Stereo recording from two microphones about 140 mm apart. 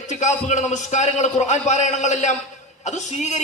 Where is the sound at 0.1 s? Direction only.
55° left (ahead or behind).